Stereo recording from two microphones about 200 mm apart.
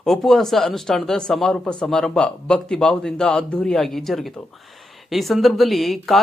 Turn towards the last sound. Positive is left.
turn(degrees=0)  # may be behind; listen again after turning